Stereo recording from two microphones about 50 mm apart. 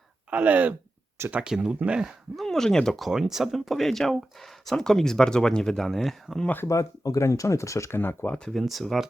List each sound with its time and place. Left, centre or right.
0.3 s speech: right
1.4 s speech: centre
2.3 s speech: centre
3.1 s speech: centre
6.7 s speech: left
7.9 s speech: left
8.5 s speech: centre